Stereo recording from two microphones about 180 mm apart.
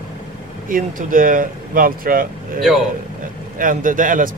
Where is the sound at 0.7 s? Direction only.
50° right (ahead or behind).